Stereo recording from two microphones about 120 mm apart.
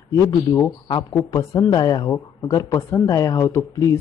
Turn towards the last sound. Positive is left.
turn(degrees=25)  # may be behind; listen again after turning